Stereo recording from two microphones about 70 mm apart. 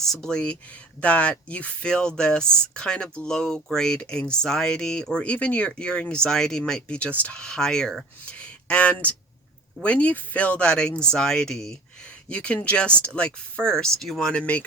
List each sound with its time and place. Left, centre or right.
0.0 s speech: centre